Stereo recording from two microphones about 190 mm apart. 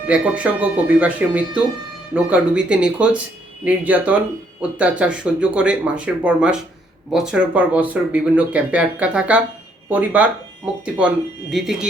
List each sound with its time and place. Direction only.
0.1 s speech: 5° right (ahead or behind)